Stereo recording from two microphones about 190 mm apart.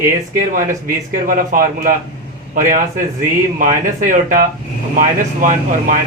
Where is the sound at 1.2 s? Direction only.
50° right (ahead or behind).